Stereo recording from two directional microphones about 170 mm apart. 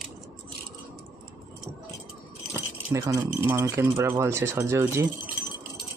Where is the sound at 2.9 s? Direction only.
20° right (ahead or behind).